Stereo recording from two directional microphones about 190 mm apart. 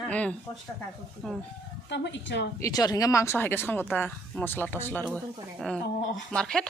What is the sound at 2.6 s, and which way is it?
Speech, 20° left (ahead or behind).